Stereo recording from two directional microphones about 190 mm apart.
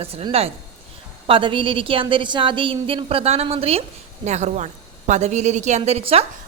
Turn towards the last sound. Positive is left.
turn(degrees=-30)  # may be behind; listen again after turning